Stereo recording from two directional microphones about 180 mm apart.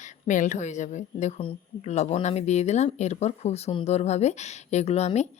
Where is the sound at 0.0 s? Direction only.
45° left (ahead or behind).